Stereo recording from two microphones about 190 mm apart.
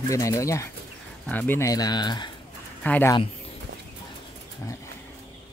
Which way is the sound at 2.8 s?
10° left (ahead or behind).